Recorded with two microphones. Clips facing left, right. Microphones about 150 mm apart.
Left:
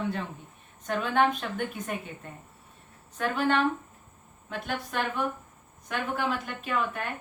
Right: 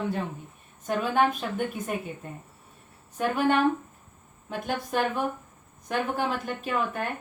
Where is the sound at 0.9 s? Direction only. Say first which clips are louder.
Right 1 dB; 5° right (ahead or behind).